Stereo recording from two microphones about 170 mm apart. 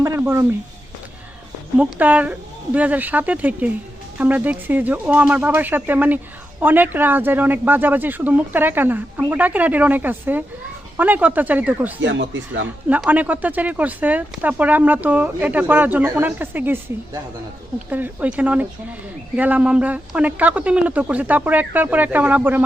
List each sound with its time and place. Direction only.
0.0 s a sound: 15° right (ahead or behind)
1.8 s speech: 10° right (ahead or behind)
12.0 s speech: 90° right
12.9 s speech: 10° right (ahead or behind)